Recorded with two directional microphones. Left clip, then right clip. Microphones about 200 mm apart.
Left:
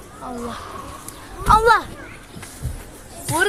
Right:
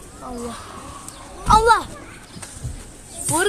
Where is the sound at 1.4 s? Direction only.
15° left (ahead or behind).